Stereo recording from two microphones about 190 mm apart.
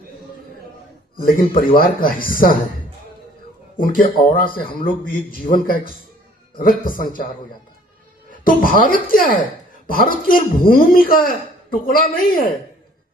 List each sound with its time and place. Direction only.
1.2 s a man's voice: 50° left (ahead or behind)
3.8 s a man's voice: 45° left (ahead or behind)
8.3 s a man's voice: 45° left (ahead or behind)